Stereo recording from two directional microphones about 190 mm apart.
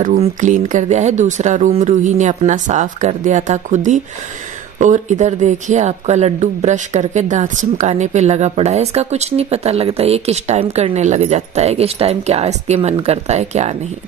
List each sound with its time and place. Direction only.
0.0 s speech: 40° right (ahead or behind)